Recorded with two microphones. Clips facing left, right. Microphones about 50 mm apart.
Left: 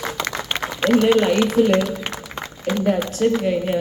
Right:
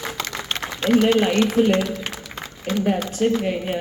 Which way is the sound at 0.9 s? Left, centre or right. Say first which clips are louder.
Left 1 dB; centre.